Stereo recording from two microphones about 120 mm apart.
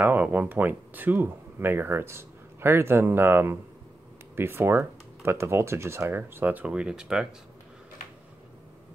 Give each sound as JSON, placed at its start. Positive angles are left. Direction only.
{"t": 0.0, "sound": "speech", "side_deg": -15}